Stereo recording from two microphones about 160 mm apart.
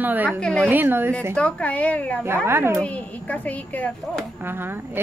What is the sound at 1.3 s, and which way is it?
Speech, 10° left (ahead or behind).